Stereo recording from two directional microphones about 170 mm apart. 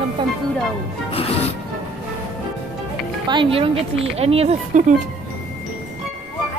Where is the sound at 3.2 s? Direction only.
30° right (ahead or behind).